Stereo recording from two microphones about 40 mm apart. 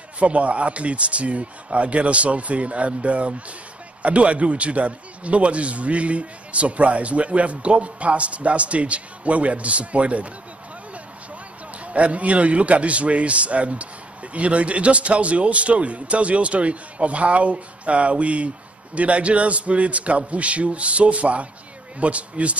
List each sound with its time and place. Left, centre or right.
0.2 s a man's voice: right
11.8 s a man's voice: right